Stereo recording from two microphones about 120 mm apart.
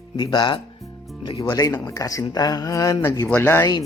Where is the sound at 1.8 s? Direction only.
30° left (ahead or behind).